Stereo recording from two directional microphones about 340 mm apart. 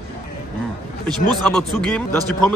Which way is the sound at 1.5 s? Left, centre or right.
Centre.